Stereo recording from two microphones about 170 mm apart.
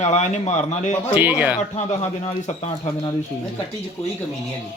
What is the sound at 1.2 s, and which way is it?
Speech, 10° right (ahead or behind).